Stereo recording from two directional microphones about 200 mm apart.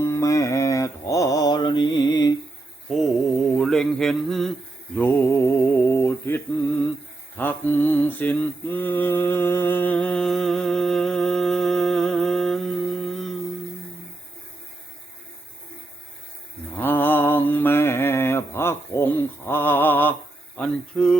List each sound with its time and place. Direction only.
0.0 s mantra: 15° left (ahead or behind)
3.5 s a sound: centre (ahead or behind)
4.9 s speech: 10° left (ahead or behind)
7.3 s mantra: 10° left (ahead or behind)
16.7 s mantra: 10° left (ahead or behind)
20.6 s speech: 5° left (ahead or behind)